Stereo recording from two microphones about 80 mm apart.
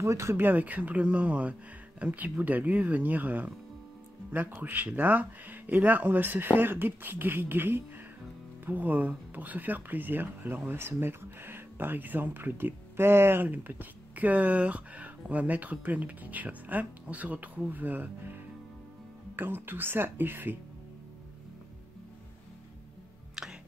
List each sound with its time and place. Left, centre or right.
0.0 s speech: right
23.4 s music: centre